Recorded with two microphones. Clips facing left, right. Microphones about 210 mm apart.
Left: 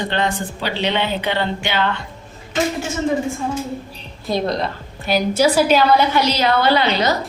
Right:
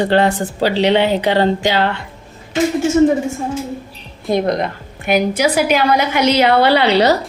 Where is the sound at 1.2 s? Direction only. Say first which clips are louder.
Right 7 dB; 35° right (ahead or behind).